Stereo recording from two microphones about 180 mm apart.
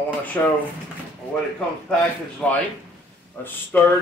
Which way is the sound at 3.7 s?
10° left (ahead or behind).